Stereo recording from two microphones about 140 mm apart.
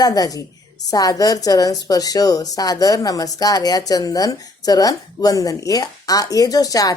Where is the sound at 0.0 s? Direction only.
25° left (ahead or behind).